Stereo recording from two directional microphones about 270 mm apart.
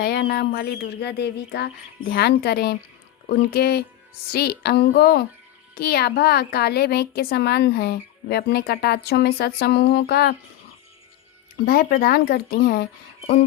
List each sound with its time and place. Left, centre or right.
0.0 s a woman's voice: left
11.6 s a woman's voice: left